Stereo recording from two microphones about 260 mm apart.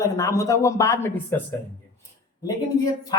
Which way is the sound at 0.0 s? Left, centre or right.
Centre.